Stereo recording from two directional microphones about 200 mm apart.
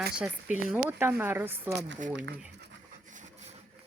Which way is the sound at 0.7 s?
10° right (ahead or behind).